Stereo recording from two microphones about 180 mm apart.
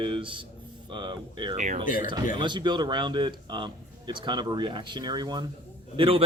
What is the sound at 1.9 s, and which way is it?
Speech, 50° left (ahead or behind).